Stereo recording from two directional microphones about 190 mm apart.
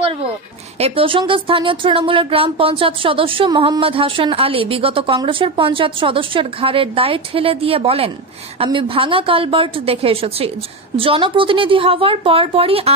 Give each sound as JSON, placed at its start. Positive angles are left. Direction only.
{"t": 0.7, "sound": "speech", "side_deg": -30}